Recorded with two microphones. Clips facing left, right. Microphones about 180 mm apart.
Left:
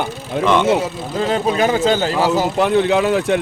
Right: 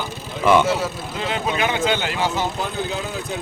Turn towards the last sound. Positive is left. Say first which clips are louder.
# left 12 dB
turn(degrees=75)  # may be behind; listen again after turning